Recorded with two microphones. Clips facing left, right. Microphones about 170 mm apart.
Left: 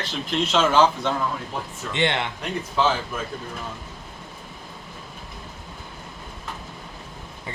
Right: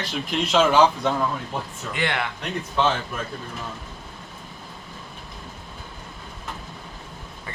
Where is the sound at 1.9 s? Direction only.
25° left (ahead or behind).